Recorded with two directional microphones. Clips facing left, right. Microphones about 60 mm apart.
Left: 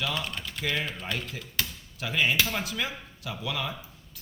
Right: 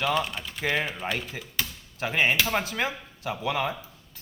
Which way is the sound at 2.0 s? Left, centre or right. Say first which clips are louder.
Right 2 dB; right.